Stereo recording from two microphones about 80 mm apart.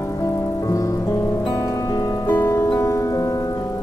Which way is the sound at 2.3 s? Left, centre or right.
Left.